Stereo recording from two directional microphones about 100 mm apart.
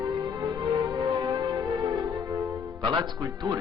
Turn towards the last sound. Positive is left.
turn(degrees=-40)  # may be behind; listen again after turning